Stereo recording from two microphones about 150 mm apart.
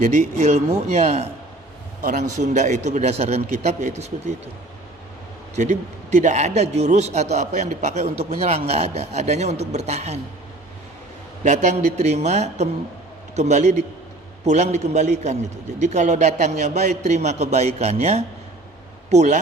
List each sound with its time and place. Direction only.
0.0 s a man's voice: 55° right (ahead or behind)
5.5 s a man's voice: 55° right (ahead or behind)
11.4 s a man's voice: 50° right (ahead or behind)